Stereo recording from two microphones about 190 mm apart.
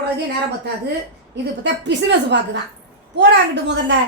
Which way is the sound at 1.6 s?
70° right (ahead or behind).